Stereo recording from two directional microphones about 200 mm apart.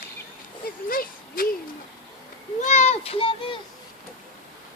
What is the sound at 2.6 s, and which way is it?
Children playing, 35° left (ahead or behind).